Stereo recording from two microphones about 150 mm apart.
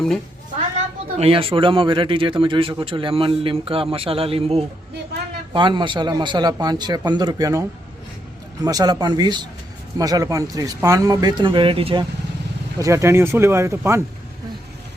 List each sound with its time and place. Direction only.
1.1 s a man's voice: 40° right (ahead or behind)
12.8 s speech: 20° right (ahead or behind)